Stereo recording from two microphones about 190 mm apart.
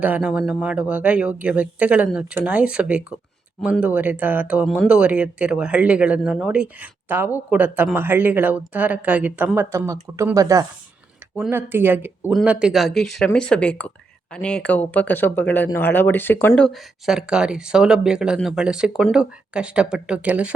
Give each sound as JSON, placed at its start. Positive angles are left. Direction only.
{"t": 0.0, "sound": "speech", "side_deg": -5}